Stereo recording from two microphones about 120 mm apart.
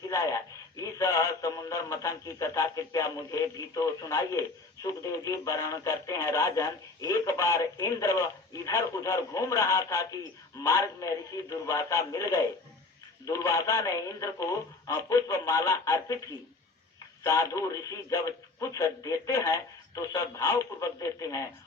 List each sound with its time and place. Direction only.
0.1 s radio: 25° left (ahead or behind)
4.8 s speech: 30° left (ahead or behind)
17.2 s speech: 25° left (ahead or behind)